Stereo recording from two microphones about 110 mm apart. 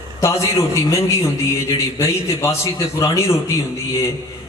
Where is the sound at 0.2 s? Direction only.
30° left (ahead or behind).